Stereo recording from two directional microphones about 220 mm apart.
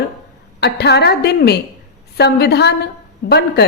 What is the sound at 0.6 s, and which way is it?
A woman's voice, 50° left (ahead or behind).